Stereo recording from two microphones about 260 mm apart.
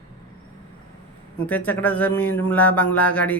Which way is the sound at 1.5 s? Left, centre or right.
Centre.